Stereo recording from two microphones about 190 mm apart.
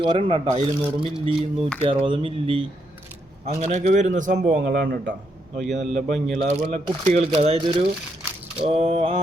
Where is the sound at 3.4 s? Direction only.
35° right (ahead or behind).